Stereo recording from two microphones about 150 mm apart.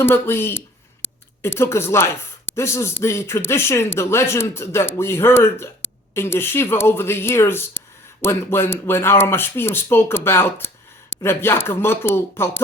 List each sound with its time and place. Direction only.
0.0 s speech: 15° left (ahead or behind)